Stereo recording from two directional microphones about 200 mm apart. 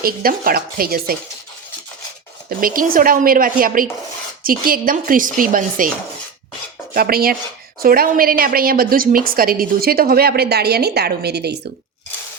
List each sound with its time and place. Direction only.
0.0 s a woman's voice: 45° right (ahead or behind)
2.5 s a woman's voice: 45° right (ahead or behind)
6.9 s a woman's voice: 50° right (ahead or behind)